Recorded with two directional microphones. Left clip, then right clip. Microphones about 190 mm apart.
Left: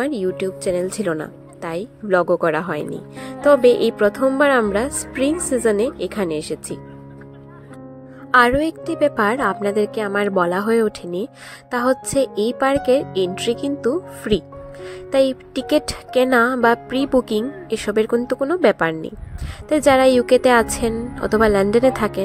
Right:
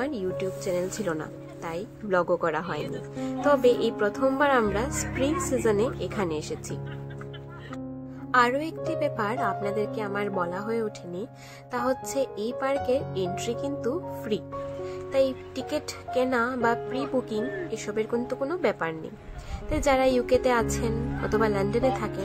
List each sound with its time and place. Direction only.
0.0 s a woman's voice: 30° left (ahead or behind)
3.3 s music: 30° left (ahead or behind)
4.4 s a woman's voice: 30° left (ahead or behind)
8.3 s music: 35° left (ahead or behind)